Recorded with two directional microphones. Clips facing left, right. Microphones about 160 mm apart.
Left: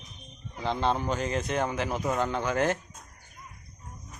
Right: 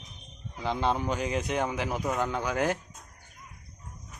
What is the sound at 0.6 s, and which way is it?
A man's voice, 5° right (ahead or behind).